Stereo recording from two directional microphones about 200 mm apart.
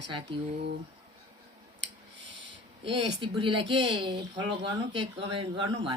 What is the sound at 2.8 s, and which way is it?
Speech, 25° right (ahead or behind).